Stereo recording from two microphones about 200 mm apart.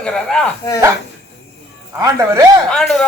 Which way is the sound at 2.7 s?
5° left (ahead or behind).